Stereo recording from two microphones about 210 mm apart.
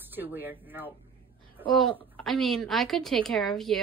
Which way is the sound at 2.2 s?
Centre (ahead or behind).